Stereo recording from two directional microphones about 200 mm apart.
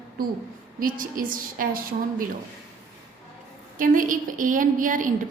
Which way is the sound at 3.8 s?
40° right (ahead or behind).